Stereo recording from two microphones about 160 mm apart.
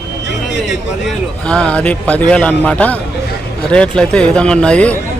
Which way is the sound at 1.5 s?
5° left (ahead or behind).